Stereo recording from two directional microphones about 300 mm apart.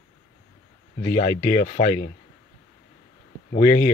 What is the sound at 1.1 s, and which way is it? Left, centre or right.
Speech, left.